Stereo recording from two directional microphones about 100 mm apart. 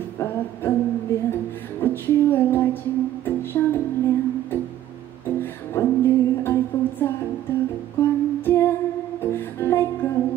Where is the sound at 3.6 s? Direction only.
25° left (ahead or behind).